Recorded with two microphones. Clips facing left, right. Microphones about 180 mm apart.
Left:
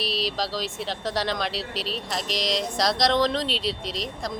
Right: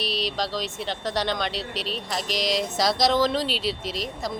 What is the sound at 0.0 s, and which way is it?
Speech, centre (ahead or behind).